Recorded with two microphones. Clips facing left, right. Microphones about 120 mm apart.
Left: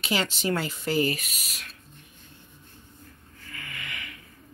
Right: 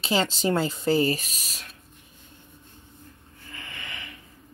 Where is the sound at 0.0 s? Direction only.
30° right (ahead or behind).